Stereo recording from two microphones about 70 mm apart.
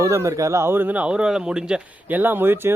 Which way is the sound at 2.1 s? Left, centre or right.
Right.